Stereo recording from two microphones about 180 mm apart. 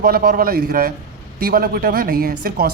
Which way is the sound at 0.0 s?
55° right (ahead or behind).